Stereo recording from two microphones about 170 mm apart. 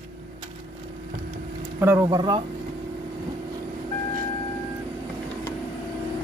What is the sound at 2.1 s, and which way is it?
Speech, 25° right (ahead or behind).